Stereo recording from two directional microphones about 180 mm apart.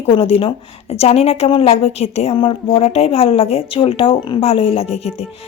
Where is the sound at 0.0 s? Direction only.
30° left (ahead or behind).